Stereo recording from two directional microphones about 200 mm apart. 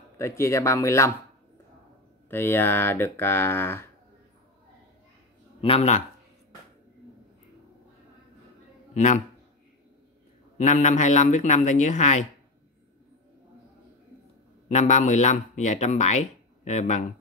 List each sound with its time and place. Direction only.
0.2 s speech: 15° left (ahead or behind)
2.2 s speech: 10° left (ahead or behind)
5.6 s speech: 30° left (ahead or behind)
8.9 s speech: 35° left (ahead or behind)
10.6 s speech: 40° left (ahead or behind)
14.7 s speech: 35° left (ahead or behind)